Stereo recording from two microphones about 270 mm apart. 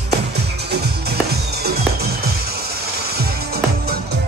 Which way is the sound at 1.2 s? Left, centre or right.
Right.